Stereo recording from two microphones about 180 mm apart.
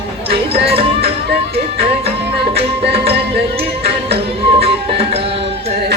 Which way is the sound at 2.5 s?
35° right (ahead or behind).